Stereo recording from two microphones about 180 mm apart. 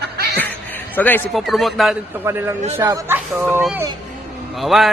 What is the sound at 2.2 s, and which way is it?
Speech, 15° right (ahead or behind).